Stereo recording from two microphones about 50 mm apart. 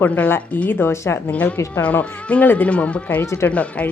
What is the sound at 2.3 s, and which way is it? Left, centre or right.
Speech, left.